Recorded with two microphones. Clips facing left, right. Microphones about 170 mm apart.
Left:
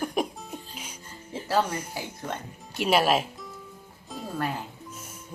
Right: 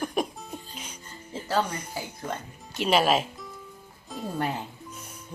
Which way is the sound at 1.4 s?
5° left (ahead or behind).